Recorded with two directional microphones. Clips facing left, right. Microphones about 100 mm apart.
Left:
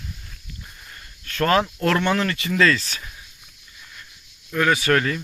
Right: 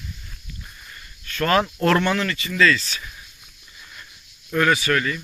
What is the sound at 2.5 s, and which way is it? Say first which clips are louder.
Speech: even; 40° left (ahead or behind).